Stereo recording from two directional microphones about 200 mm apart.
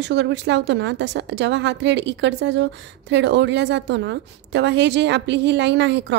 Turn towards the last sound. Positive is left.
turn(degrees=-60)  # may be behind; listen again after turning